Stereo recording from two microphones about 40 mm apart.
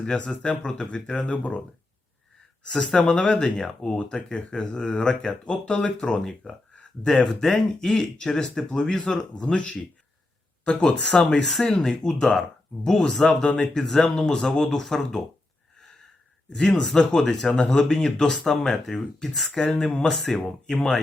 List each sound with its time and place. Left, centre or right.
0.4 s speech: left
2.6 s speech: centre
7.1 s speech: centre
16.5 s speech: centre
20.1 s speech: centre